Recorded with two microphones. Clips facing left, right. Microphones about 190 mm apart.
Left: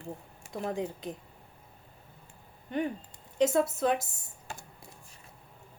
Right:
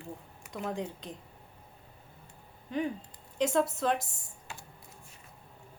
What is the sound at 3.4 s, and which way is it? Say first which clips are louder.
Speech: left 2 dB; 5° left (ahead or behind).